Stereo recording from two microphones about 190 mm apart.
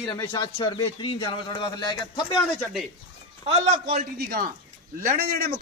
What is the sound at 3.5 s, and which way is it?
Speech, 30° right (ahead or behind).